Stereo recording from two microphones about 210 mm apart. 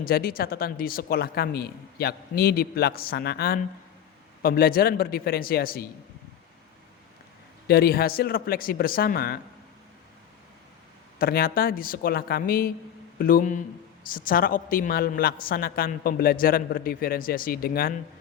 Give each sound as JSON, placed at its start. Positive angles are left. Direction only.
{"t": 0.0, "sound": "a man's voice", "side_deg": 45}
{"t": 7.7, "sound": "a man's voice", "side_deg": 45}
{"t": 11.2, "sound": "a man's voice", "side_deg": 45}